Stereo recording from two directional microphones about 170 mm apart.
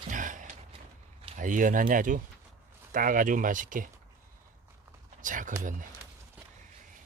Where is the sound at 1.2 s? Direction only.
50° right (ahead or behind).